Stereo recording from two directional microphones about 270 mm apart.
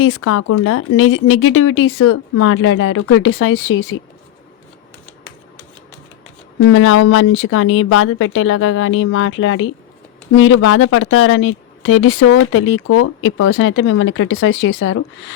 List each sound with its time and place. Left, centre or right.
0.0 s speech: left
6.7 s speech: left